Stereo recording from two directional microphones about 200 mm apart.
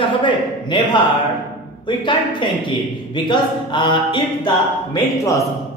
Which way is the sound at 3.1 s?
25° left (ahead or behind).